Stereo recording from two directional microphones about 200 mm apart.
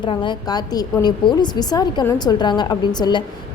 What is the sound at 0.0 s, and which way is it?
A woman's voice, 25° left (ahead or behind).